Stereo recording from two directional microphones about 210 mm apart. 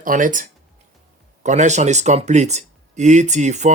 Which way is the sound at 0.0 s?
40° right (ahead or behind).